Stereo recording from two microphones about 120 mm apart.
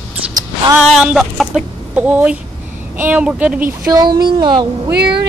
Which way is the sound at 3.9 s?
35° right (ahead or behind).